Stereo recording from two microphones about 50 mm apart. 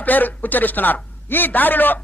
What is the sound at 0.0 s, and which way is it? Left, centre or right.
A man's voice, left.